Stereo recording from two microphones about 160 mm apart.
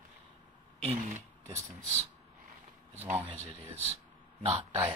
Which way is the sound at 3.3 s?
40° right (ahead or behind).